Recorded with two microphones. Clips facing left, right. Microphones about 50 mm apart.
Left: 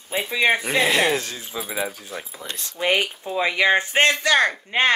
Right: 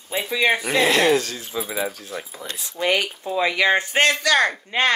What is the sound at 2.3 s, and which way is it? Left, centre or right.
Speech, centre.